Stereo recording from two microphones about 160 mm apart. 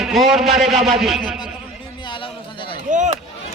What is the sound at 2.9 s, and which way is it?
Chop, 50° right (ahead or behind).